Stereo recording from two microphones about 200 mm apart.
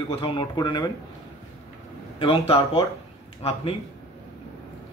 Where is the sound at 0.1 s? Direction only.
25° left (ahead or behind).